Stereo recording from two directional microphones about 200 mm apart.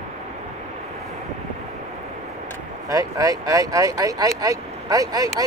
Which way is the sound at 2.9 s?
15° right (ahead or behind).